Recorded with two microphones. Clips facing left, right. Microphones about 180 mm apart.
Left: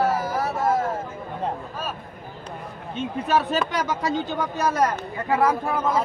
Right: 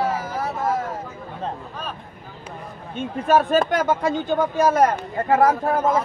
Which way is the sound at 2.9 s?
50° right (ahead or behind).